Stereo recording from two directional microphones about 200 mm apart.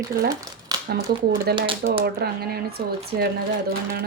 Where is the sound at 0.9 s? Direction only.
50° right (ahead or behind).